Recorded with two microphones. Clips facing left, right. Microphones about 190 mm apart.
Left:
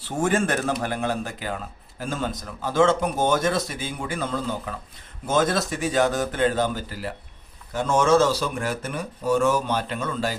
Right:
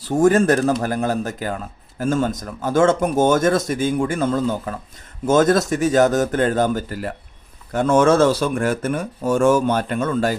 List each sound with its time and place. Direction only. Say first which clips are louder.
0.0 s speech: right 8 dB; 40° right (ahead or behind)